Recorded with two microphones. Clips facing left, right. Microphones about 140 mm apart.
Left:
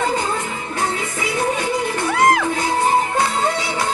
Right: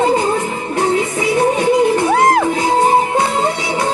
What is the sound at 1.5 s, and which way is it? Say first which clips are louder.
Music: right 9 dB; 25° right (ahead or behind).